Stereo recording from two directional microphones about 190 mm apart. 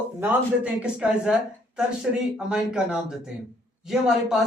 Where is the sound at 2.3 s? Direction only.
5° right (ahead or behind).